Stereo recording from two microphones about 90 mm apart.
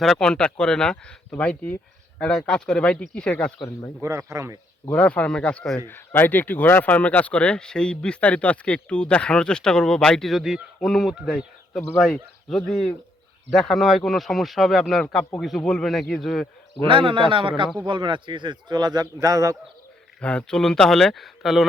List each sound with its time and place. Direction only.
0.0 s speech: 5° left (ahead or behind)
4.0 s speech: 30° right (ahead or behind)
4.9 s speech: 15° left (ahead or behind)
16.8 s a man's voice: 70° right (ahead or behind); by 19.5 s 40° right (ahead or behind)
20.2 s speech: 10° left (ahead or behind)